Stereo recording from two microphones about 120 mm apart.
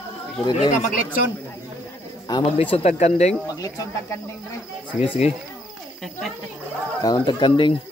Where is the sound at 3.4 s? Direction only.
30° left (ahead or behind).